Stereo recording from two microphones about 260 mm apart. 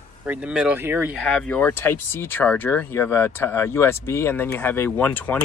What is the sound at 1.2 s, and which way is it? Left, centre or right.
Speech, centre.